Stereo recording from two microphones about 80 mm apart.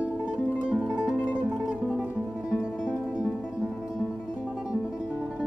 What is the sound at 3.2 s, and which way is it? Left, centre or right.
Music, centre.